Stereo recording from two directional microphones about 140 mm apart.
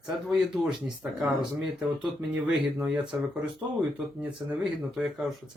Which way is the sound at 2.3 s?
10° right (ahead or behind).